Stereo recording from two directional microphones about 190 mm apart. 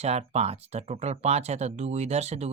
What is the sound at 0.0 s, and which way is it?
Speech, 35° right (ahead or behind).